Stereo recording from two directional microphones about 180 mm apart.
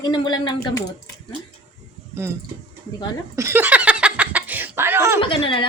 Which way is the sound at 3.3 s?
15° right (ahead or behind).